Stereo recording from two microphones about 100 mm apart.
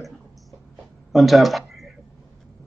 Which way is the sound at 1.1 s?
Centre (ahead or behind).